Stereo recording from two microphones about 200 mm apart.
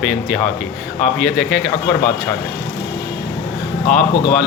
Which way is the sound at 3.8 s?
40° left (ahead or behind).